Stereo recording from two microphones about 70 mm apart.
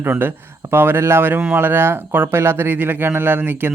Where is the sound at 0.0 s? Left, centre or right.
Right.